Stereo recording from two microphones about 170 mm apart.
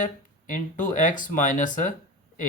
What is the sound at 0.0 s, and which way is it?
Speech, 50° left (ahead or behind).